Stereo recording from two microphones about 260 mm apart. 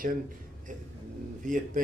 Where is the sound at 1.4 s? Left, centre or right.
Right.